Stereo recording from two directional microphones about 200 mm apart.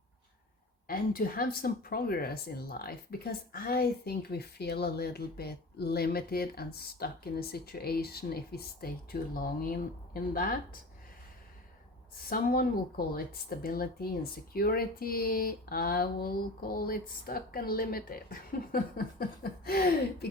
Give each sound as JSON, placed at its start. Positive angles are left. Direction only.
{"t": 0.9, "sound": "speech", "side_deg": 45}
{"t": 12.3, "sound": "speech", "side_deg": 45}